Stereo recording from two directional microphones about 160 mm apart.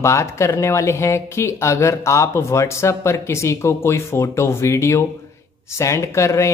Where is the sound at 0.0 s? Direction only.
15° left (ahead or behind).